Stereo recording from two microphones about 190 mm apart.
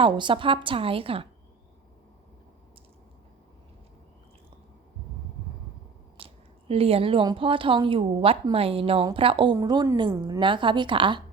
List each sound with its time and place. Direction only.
0.0 s a woman's voice: 25° right (ahead or behind)
6.1 s a woman's voice: 30° right (ahead or behind)